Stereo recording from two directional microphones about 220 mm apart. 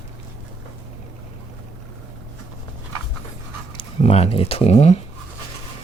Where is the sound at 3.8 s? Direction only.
30° left (ahead or behind).